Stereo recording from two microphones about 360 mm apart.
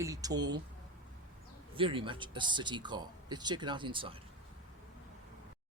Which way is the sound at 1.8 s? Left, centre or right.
Centre.